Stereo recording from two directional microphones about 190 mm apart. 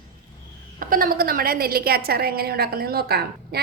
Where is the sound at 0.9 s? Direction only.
50° right (ahead or behind).